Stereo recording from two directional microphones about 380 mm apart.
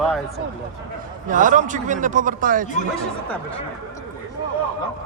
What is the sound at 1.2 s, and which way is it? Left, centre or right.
A man's voice, centre.